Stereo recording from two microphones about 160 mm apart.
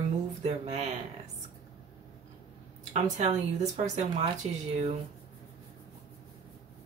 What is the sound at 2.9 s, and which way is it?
Speech, 45° right (ahead or behind).